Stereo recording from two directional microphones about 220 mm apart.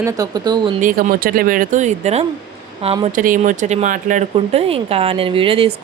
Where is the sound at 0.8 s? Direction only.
35° right (ahead or behind).